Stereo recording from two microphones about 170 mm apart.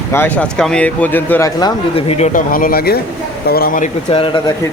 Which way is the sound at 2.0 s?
35° left (ahead or behind).